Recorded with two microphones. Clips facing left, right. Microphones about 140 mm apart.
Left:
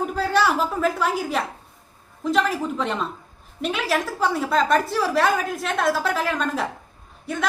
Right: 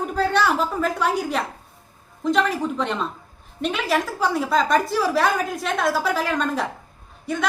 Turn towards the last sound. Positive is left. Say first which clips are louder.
# right 2 dB
turn(degrees=0)  # may be behind; listen again after turning